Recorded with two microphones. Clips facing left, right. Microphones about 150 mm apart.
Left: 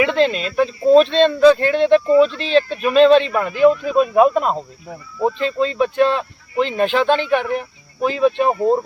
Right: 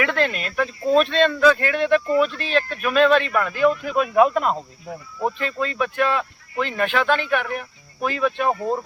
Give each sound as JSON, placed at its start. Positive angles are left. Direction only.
{"t": 0.0, "sound": "speech", "side_deg": 20}